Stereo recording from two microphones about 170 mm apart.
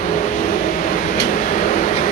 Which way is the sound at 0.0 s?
50° left (ahead or behind).